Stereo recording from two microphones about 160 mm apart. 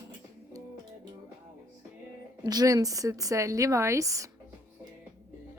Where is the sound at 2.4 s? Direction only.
25° right (ahead or behind).